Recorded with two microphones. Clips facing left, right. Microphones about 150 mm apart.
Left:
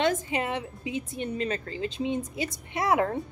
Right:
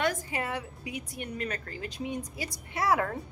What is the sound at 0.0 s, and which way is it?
A woman's voice, 20° left (ahead or behind).